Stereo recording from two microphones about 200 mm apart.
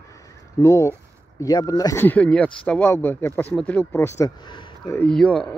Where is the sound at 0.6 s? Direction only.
15° left (ahead or behind).